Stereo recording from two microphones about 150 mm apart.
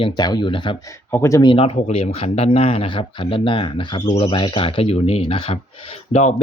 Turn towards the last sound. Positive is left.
turn(degrees=45)  # may be behind; listen again after turning